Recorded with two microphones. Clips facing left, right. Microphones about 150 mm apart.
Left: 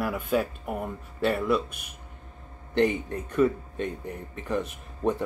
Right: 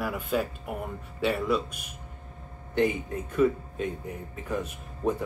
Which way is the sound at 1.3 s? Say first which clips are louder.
Left 2 dB; 55° left (ahead or behind).